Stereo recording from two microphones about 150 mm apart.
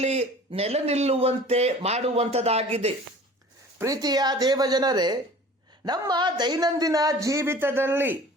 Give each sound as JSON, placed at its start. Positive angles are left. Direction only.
{"t": 0.0, "sound": "a man's voice", "side_deg": -45}
{"t": 3.8, "sound": "a man's voice", "side_deg": -25}